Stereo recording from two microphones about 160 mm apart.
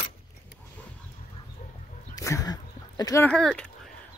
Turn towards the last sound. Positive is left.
turn(degrees=5)  # may be behind; listen again after turning